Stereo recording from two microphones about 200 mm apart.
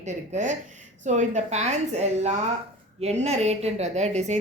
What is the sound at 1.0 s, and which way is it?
A woman's voice, 35° right (ahead or behind).